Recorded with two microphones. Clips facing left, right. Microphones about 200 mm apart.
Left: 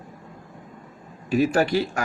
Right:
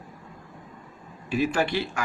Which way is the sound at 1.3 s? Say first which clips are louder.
Left 5 dB; 40° left (ahead or behind).